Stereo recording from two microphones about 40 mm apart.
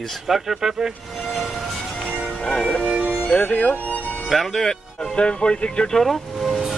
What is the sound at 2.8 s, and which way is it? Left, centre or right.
Music, right.